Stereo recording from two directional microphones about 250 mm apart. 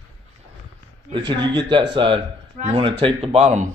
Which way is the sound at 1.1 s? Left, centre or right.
Centre.